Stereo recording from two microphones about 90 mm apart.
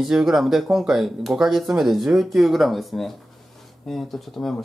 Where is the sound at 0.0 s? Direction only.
5° right (ahead or behind).